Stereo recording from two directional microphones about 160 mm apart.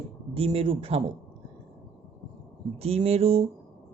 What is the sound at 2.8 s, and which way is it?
Mantra, 40° right (ahead or behind).